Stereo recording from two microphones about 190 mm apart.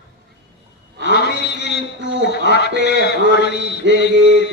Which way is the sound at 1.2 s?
60° left (ahead or behind).